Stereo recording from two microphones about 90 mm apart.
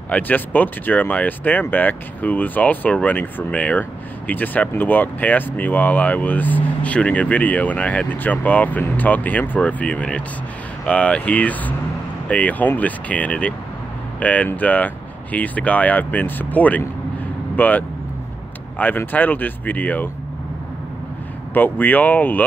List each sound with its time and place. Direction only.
0.1 s speech: 20° left (ahead or behind)
21.5 s speech: 20° left (ahead or behind)